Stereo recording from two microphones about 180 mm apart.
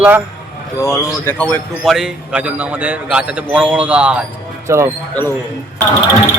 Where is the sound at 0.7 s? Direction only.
15° left (ahead or behind).